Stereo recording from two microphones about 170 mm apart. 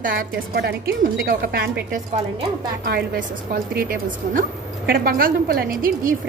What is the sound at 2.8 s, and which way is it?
A woman's voice, 65° right (ahead or behind).